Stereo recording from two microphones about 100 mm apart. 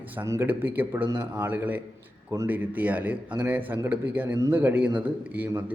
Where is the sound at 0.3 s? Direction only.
20° right (ahead or behind).